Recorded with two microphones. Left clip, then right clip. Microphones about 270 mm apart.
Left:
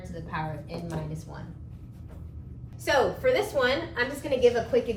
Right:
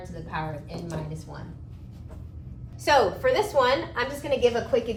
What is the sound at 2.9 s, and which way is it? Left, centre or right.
A woman's voice, centre.